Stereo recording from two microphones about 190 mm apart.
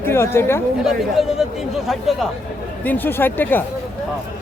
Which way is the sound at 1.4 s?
Centre (ahead or behind).